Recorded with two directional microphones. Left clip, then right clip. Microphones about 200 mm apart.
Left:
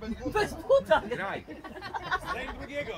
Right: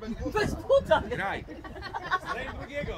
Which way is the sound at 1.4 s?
45° left (ahead or behind).